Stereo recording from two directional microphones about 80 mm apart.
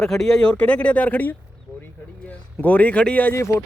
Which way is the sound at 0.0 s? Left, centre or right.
Centre.